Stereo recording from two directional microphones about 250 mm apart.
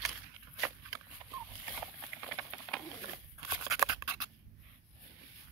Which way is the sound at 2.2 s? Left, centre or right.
Centre.